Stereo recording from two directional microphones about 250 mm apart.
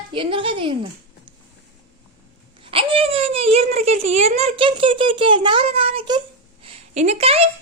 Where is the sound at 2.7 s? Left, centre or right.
Right.